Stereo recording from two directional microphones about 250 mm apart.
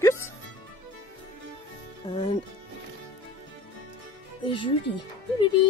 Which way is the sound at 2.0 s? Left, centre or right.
Left.